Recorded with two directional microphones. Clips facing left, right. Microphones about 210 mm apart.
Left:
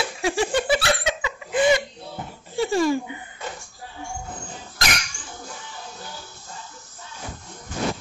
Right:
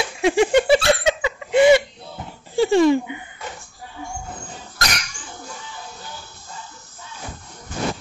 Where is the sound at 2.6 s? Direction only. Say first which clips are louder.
Right 6 dB; 25° right (ahead or behind).